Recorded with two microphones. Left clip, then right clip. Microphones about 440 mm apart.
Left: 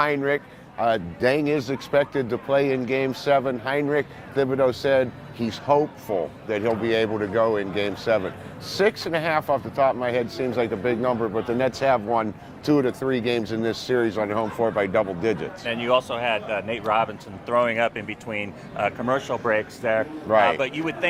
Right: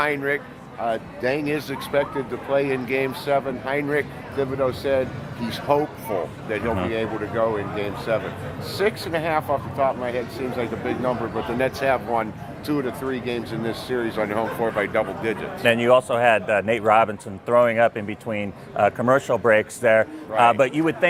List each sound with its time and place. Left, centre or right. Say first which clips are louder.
0.0 s speech: left 1 dB; left
0.8 s speech: left 3 dB; left
5.5 s speech: left 1 dB; left
6.5 s speech: left 2 dB; left
11.5 s speech: even; left
15.6 s a man's voice: right 6 dB; right